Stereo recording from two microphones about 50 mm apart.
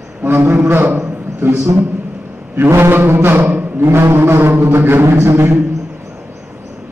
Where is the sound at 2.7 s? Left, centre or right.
Right.